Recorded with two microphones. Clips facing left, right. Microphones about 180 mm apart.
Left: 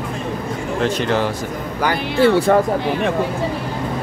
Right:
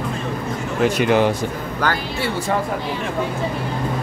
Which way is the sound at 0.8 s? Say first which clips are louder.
Right 3 dB; 10° right (ahead or behind).